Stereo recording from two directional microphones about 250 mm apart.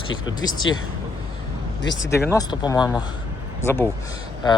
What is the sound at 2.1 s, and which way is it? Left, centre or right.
Speech, centre.